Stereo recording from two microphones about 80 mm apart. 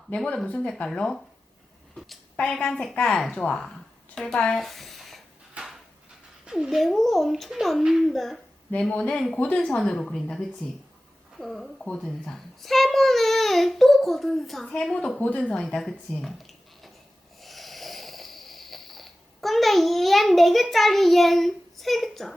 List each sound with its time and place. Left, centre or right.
0.1 s a woman's voice: centre
2.5 s a woman's voice: centre
3.3 s a woman's voice: centre
4.5 s a sound: centre
5.6 s drawer open or close: centre
6.4 s cat: centre
6.7 s a child's voice: centre
9.0 s a woman's voice: centre
15.8 s speech: centre
17.4 s snoring: centre